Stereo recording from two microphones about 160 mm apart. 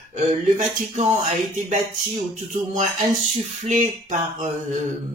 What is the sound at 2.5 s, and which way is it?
Speech, 50° right (ahead or behind).